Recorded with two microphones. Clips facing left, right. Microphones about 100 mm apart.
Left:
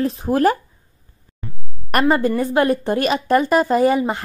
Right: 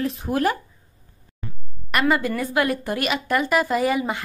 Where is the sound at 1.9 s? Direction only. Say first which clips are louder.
Left 4 dB; 40° left (ahead or behind).